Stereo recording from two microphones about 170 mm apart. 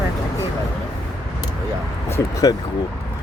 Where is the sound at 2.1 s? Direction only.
20° left (ahead or behind).